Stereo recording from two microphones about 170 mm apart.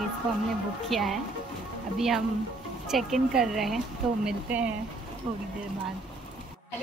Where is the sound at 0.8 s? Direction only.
Centre (ahead or behind).